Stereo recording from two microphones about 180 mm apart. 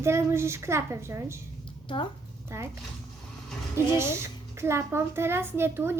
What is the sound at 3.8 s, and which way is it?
A woman's voice, 15° right (ahead or behind).